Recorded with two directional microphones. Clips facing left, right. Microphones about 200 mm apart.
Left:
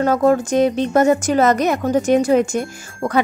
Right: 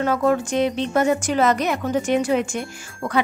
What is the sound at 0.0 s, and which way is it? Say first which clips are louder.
A woman's voice: left 4 dB; 40° left (ahead or behind).